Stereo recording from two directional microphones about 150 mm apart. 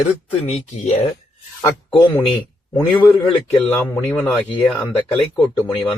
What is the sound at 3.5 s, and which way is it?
Speech, 10° left (ahead or behind).